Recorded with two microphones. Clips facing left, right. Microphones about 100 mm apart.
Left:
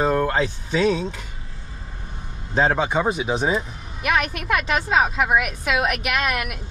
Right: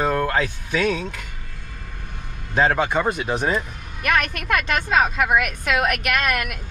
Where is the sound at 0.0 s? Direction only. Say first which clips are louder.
Left 1 dB; 10° left (ahead or behind).